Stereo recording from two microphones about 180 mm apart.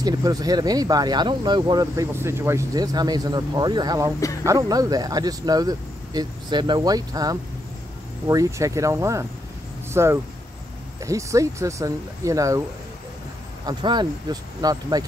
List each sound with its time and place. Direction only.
0.0 s speech: 20° right (ahead or behind)
13.7 s speech: 25° right (ahead or behind)